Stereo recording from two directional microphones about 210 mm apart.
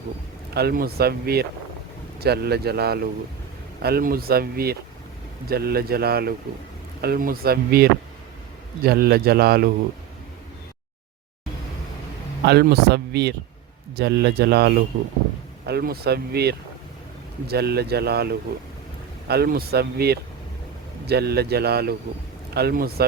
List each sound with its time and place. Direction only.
0.5 s speech: 45° right (ahead or behind)
12.5 s speech: 50° right (ahead or behind)